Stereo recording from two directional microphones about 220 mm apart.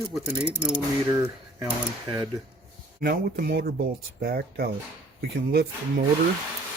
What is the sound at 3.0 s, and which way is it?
Speech, 45° right (ahead or behind).